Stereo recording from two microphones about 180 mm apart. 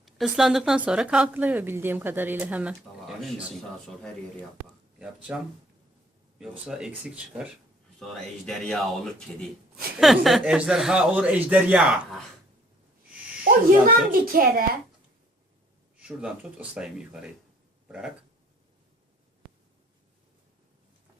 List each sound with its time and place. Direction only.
0.0 s a woman's voice: centre (ahead or behind)
6.7 s speech: 5° right (ahead or behind)
13.4 s a child's voice: 55° right (ahead or behind)
16.0 s speech: 5° right (ahead or behind)